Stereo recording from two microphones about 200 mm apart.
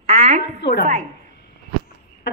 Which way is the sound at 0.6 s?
60° left (ahead or behind).